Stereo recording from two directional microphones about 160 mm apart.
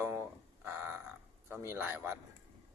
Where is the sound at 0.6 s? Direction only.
15° right (ahead or behind).